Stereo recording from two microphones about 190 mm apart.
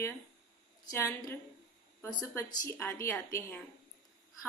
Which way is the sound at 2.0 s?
15° left (ahead or behind).